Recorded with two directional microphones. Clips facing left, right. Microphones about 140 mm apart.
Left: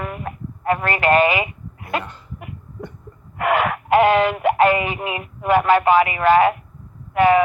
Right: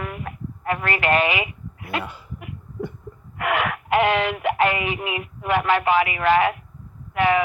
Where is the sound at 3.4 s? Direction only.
40° left (ahead or behind).